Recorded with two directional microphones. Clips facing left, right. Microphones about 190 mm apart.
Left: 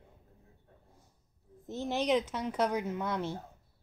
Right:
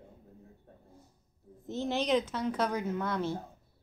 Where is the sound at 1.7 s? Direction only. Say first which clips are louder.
Right 1 dB; 10° left (ahead or behind).